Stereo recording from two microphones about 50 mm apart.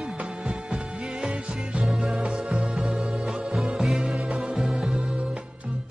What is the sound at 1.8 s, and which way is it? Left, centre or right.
Music, centre.